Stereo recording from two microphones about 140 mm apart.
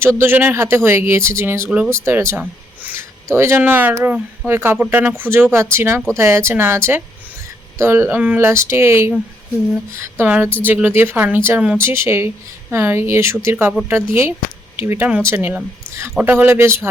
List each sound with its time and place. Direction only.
0.2 s speech: 15° right (ahead or behind)